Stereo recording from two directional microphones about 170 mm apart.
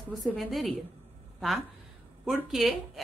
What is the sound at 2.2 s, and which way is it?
Speech, centre (ahead or behind).